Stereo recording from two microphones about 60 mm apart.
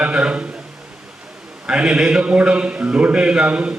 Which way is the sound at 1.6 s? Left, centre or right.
Centre.